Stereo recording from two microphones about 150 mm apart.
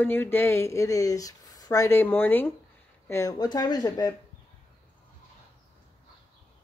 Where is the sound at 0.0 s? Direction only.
15° left (ahead or behind).